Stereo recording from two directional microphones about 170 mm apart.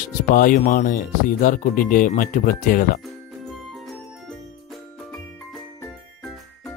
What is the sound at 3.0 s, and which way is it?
Music, centre (ahead or behind).